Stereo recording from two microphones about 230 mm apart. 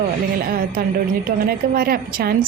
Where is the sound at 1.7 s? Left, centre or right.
Right.